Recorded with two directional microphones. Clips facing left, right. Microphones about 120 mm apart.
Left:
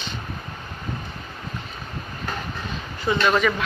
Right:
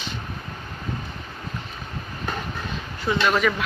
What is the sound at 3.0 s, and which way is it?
Speech, centre (ahead or behind).